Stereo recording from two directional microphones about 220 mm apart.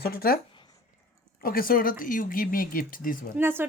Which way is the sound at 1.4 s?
40° left (ahead or behind).